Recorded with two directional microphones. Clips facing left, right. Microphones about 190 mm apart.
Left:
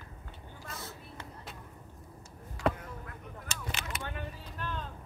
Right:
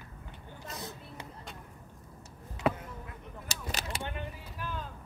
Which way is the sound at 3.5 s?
40° right (ahead or behind).